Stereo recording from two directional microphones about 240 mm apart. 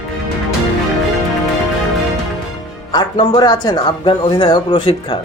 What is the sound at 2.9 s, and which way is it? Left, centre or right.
Speech, centre.